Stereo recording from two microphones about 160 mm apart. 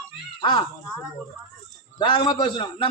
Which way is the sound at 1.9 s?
30° left (ahead or behind).